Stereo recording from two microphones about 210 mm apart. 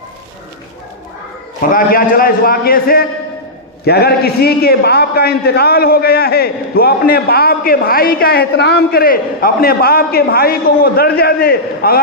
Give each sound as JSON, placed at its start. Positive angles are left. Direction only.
{"t": 1.7, "sound": "a man's voice", "side_deg": 45}